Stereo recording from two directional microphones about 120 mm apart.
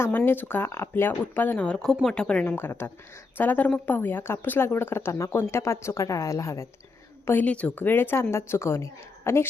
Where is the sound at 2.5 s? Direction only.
20° left (ahead or behind).